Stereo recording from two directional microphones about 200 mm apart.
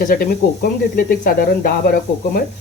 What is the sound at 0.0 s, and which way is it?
Speech, 45° left (ahead or behind).